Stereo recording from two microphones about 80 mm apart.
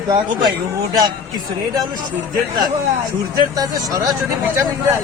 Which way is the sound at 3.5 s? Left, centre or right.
Right.